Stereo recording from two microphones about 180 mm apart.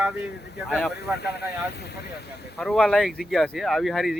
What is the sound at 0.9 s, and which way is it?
Speech, 65° left (ahead or behind).